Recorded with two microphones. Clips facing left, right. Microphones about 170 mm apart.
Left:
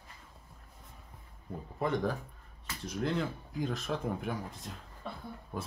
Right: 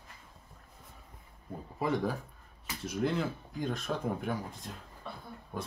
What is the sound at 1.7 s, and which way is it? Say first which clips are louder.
Speech: even; 5° right (ahead or behind).